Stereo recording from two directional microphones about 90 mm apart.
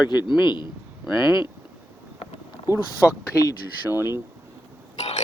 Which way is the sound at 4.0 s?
25° right (ahead or behind).